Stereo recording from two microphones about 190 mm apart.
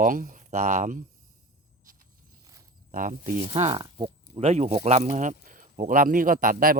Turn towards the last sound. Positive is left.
turn(degrees=-50)  # may be behind; listen again after turning